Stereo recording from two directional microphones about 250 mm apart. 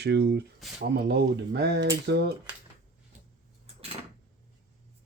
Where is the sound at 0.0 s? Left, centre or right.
Right.